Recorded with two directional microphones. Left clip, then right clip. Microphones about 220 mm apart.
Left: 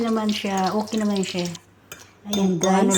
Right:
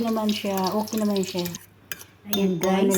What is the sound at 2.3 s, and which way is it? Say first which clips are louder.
Speech: left 2 dB; 15° left (ahead or behind).